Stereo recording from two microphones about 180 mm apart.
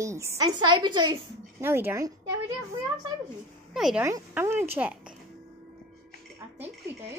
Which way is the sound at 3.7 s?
Centre (ahead or behind).